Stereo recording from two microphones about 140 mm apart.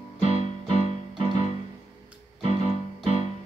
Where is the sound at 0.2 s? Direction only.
55° left (ahead or behind).